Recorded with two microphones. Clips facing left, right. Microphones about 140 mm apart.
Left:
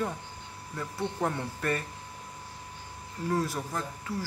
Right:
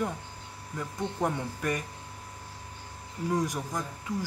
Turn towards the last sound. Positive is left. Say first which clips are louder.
# right 1 dB
turn(degrees=-15)  # may be behind; listen again after turning